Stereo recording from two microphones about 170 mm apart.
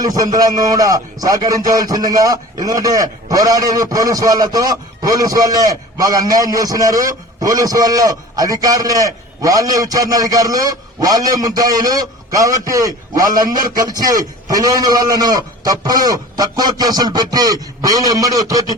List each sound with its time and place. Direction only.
0.0 s a man's voice: 20° right (ahead or behind)